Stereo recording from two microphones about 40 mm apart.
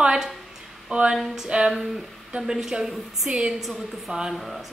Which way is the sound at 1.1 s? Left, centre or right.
Centre.